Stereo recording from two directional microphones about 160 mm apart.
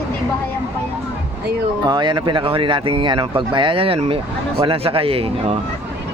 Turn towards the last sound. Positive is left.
turn(degrees=-35)  # may be behind; listen again after turning